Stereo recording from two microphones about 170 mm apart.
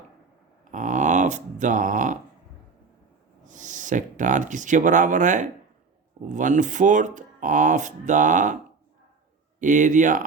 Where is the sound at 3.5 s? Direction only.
50° right (ahead or behind).